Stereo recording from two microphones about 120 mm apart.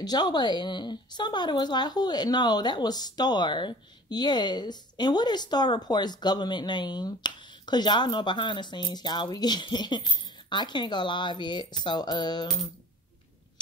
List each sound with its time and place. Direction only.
0.0 s speech: 35° left (ahead or behind)